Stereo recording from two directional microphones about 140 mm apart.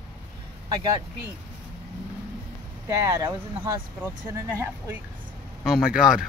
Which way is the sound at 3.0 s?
25° right (ahead or behind).